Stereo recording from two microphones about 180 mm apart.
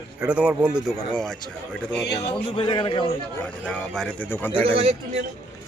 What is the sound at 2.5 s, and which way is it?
Speech, 25° left (ahead or behind).